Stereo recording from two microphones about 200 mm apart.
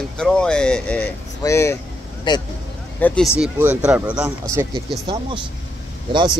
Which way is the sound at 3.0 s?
5° left (ahead or behind).